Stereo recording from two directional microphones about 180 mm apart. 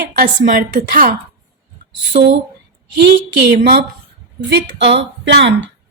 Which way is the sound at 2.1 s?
65° right (ahead or behind).